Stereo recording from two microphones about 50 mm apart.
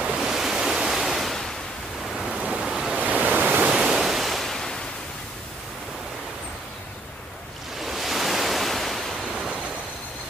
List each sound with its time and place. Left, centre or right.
0.0 s waves: centre
2.1 s ocean: centre
2.6 s waves: centre
3.0 s waves: right
3.6 s waves: centre
7.8 s waves: centre